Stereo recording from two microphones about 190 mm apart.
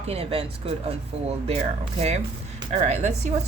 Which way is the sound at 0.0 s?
30° right (ahead or behind).